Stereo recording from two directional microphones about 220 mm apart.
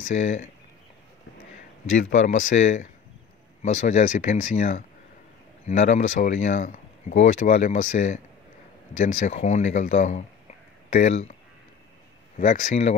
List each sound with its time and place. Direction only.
0.1 s speech: 35° left (ahead or behind)
2.2 s speech: 35° left (ahead or behind)
12.4 s speech: 35° left (ahead or behind)